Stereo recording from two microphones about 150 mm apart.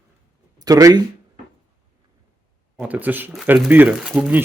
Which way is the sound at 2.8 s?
10° right (ahead or behind).